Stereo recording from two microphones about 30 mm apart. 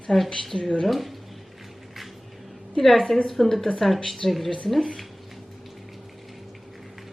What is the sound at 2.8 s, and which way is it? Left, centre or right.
A woman's voice, centre.